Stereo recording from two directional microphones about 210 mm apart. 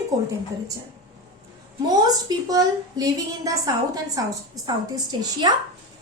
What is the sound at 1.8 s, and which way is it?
A woman's voice, 20° right (ahead or behind).